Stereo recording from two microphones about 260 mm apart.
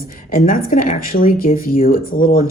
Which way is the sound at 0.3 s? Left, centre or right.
Left.